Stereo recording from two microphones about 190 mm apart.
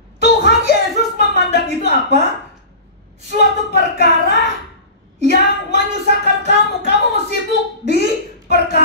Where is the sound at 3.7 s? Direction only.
65° left (ahead or behind).